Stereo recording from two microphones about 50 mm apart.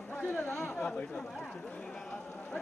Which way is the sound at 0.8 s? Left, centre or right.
Left.